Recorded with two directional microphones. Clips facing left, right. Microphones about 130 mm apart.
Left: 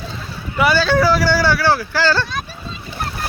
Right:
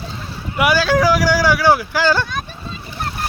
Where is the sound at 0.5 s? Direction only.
10° right (ahead or behind).